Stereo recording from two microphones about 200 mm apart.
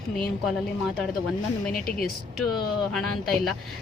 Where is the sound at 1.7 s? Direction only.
45° left (ahead or behind).